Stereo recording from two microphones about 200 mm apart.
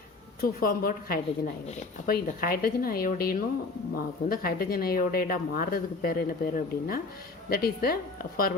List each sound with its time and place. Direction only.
0.4 s speech: 45° left (ahead or behind)